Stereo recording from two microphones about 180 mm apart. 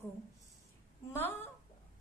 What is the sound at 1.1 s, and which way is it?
Speech, 10° left (ahead or behind).